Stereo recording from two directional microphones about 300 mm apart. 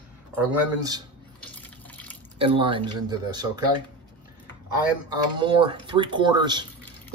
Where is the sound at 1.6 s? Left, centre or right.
Centre.